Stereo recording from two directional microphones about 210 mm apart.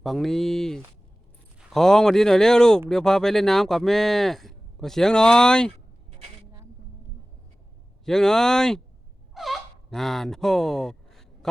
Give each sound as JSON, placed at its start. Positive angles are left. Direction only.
{"t": 0.0, "sound": "speech", "side_deg": 0}
{"t": 6.1, "sound": "a sound", "side_deg": -25}
{"t": 8.0, "sound": "speech", "side_deg": 5}